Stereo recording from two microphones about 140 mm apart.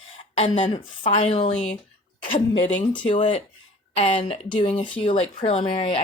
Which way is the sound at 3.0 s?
40° left (ahead or behind).